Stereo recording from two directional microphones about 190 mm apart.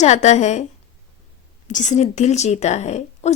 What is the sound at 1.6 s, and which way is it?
A woman's voice, 40° left (ahead or behind).